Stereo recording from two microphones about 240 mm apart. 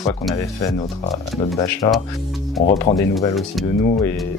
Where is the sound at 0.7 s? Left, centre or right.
Left.